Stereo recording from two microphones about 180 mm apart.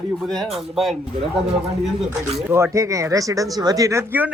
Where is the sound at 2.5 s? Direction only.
15° right (ahead or behind).